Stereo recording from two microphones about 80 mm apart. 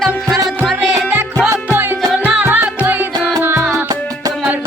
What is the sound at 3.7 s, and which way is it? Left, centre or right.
Music, right.